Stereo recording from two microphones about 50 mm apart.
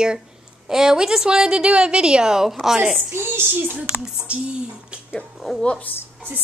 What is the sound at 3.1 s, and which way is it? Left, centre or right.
Speech, right.